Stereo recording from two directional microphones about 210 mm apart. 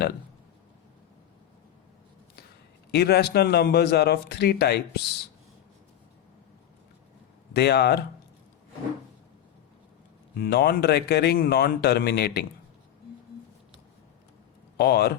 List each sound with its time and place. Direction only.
2.9 s a man's voice: 50° left (ahead or behind)
7.5 s a man's voice: 50° left (ahead or behind)
10.3 s a man's voice: 50° left (ahead or behind)
14.8 s a man's voice: 50° left (ahead or behind)